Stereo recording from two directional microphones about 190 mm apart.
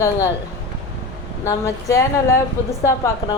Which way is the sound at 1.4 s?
15° left (ahead or behind).